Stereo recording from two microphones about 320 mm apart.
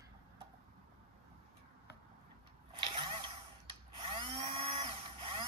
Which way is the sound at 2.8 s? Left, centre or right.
Centre.